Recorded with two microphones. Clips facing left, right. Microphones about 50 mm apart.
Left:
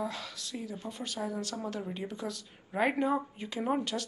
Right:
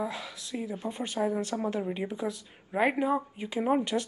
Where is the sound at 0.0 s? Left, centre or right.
Centre.